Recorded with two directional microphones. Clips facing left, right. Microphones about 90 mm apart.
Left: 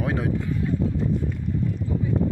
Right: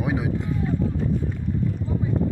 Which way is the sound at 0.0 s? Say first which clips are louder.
Even; 10° right (ahead or behind).